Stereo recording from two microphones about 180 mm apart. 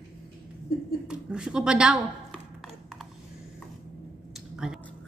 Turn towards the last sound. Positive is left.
turn(degrees=-5)  # may be behind; listen again after turning